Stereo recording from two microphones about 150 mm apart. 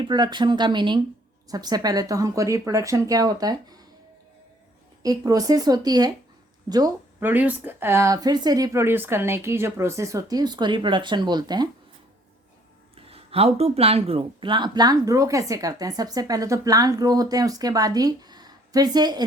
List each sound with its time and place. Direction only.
0.0 s speech: 30° right (ahead or behind)
5.0 s speech: 25° right (ahead or behind)
7.2 s speech: 10° right (ahead or behind); by 11.7 s 30° right (ahead or behind)
13.0 s speech: 40° right (ahead or behind)